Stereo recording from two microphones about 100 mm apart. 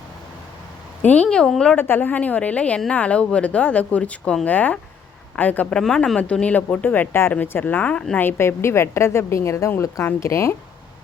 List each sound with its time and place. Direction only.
1.0 s speech: 15° left (ahead or behind)
1.7 s speech: 20° left (ahead or behind)
5.8 s speech: 5° left (ahead or behind)
8.2 s a woman's voice: 25° left (ahead or behind)